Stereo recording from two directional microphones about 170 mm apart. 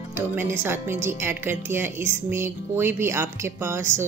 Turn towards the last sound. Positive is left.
turn(degrees=-15)  # may be behind; listen again after turning